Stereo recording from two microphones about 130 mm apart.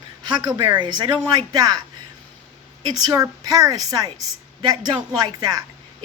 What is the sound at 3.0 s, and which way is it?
A woman's voice, 30° right (ahead or behind).